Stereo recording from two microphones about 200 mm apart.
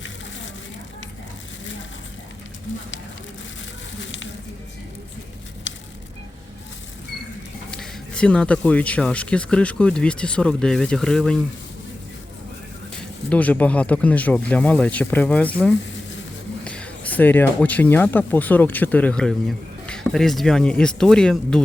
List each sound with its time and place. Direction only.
5.7 s a sound: 65° left (ahead or behind)
7.7 s speech: 5° left (ahead or behind)
13.0 s speech: 5° left (ahead or behind)